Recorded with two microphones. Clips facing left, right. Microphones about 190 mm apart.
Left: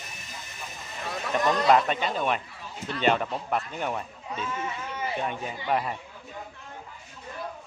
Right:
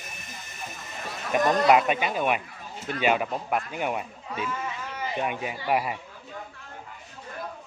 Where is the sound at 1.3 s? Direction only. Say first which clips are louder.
Right 3 dB; 45° right (ahead or behind).